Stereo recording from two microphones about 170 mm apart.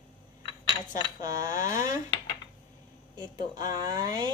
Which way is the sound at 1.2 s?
20° right (ahead or behind).